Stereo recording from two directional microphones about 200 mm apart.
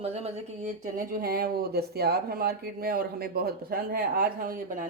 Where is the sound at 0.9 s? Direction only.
45° right (ahead or behind).